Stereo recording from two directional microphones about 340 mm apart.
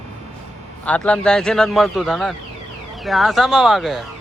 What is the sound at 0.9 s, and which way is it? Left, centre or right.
A man's voice, centre.